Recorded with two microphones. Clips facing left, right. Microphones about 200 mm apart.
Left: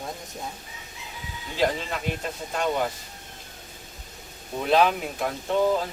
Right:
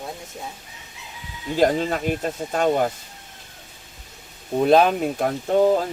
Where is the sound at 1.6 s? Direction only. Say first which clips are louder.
Right 6 dB; 45° right (ahead or behind).